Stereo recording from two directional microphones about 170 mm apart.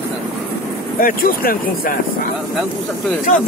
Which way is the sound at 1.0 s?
55° left (ahead or behind).